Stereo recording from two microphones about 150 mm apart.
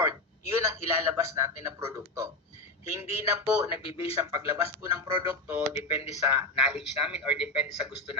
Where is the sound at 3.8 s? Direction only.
40° left (ahead or behind).